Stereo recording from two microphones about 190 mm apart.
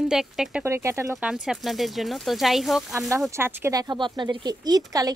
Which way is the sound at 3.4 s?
15° right (ahead or behind).